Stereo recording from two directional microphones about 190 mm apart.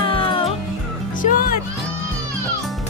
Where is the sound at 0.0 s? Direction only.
30° left (ahead or behind).